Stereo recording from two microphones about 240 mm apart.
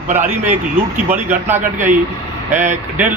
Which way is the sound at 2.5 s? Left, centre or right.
Right.